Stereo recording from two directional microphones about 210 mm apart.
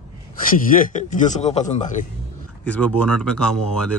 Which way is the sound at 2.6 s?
5° left (ahead or behind).